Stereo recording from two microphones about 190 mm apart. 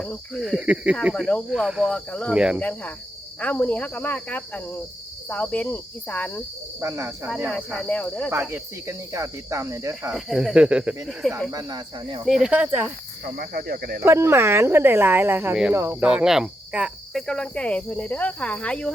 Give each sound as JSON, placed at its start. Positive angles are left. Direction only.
{"t": 0.0, "sound": "cricket", "side_deg": 0}
{"t": 1.1, "sound": "cricket", "side_deg": 5}
{"t": 2.3, "sound": "cricket", "side_deg": -5}
{"t": 2.6, "sound": "speech", "side_deg": 5}
{"t": 6.7, "sound": "cricket", "side_deg": -15}
{"t": 7.5, "sound": "cricket", "side_deg": 5}
{"t": 8.3, "sound": "cricket", "side_deg": -15}
{"t": 11.5, "sound": "speech", "side_deg": -20}
{"t": 12.4, "sound": "cricket", "side_deg": -5}
{"t": 13.2, "sound": "speech", "side_deg": -50}
{"t": 14.0, "sound": "cricket", "side_deg": -15}